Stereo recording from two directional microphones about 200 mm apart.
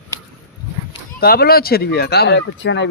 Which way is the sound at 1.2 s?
50° left (ahead or behind).